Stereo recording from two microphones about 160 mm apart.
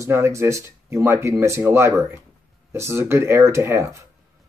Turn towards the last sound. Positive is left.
turn(degrees=-15)  # may be behind; listen again after turning